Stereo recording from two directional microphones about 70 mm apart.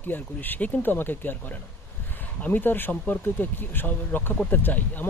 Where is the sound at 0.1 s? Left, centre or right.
Left.